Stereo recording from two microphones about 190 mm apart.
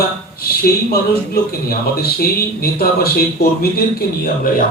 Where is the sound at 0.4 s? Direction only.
55° left (ahead or behind).